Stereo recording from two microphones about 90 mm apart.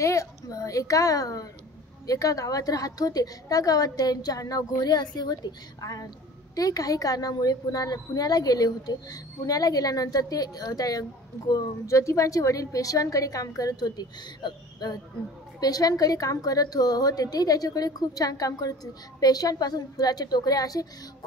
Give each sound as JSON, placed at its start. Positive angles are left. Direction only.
{"t": 0.0, "sound": "a woman's voice", "side_deg": 35}